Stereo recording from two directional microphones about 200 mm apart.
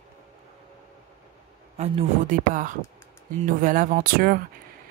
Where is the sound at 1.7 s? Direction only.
35° right (ahead or behind).